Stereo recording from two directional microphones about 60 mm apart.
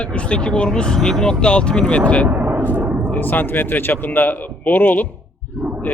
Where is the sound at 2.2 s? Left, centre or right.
Right.